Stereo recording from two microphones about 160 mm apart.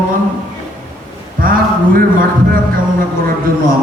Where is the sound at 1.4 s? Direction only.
60° right (ahead or behind).